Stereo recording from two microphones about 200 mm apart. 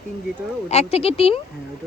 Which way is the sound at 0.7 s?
30° left (ahead or behind).